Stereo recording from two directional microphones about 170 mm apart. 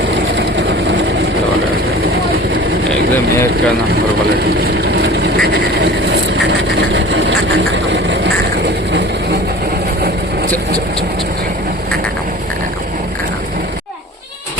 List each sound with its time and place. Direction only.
4.6 s vehicle: 70° right (ahead or behind)
6.3 s vehicle: 90° right